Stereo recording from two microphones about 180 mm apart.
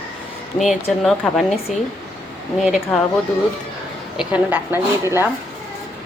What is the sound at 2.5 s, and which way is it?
Speech, centre (ahead or behind).